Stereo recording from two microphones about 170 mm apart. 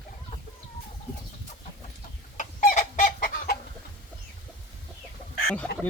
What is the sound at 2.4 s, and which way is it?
Chicken, 50° left (ahead or behind).